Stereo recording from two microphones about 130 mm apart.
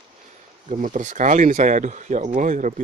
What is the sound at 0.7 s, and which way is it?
Speech, 75° right (ahead or behind).